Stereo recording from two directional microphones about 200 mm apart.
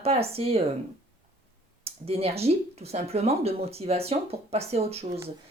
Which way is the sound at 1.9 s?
30° right (ahead or behind).